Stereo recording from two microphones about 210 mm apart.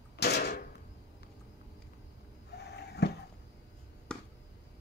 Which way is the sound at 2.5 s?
50° left (ahead or behind).